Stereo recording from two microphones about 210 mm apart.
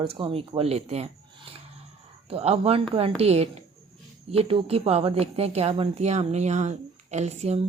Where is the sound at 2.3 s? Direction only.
30° right (ahead or behind).